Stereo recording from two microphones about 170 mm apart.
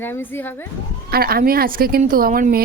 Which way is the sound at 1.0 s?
65° right (ahead or behind).